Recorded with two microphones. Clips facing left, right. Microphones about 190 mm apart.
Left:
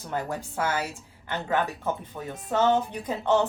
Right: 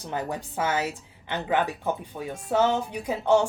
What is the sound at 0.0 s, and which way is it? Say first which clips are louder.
Music: even; 15° right (ahead or behind).